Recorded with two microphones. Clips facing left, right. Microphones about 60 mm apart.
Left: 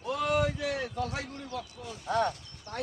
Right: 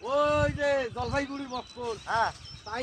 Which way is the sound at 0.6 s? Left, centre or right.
Right.